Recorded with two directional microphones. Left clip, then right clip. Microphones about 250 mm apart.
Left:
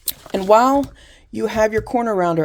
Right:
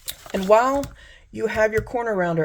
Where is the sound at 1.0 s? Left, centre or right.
Left.